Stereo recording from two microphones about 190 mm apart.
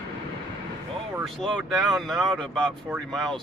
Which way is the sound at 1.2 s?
5° left (ahead or behind).